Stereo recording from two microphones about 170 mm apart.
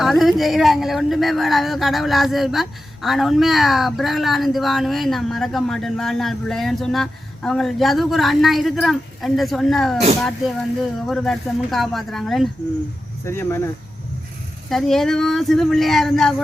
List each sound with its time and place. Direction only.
0.0 s speech: centre (ahead or behind)
11.0 s speech: centre (ahead or behind)
13.2 s speech: 15° left (ahead or behind)
14.7 s speech: centre (ahead or behind)